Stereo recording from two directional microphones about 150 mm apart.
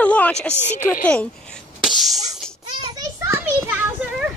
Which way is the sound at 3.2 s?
15° right (ahead or behind).